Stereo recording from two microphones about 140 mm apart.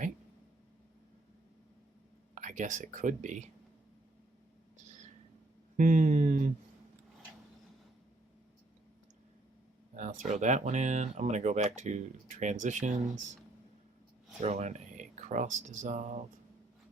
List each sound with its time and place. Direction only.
2.3 s speech: 65° right (ahead or behind)
5.7 s speech: 60° right (ahead or behind)
9.9 s speech: 60° right (ahead or behind)
14.4 s speech: 55° right (ahead or behind)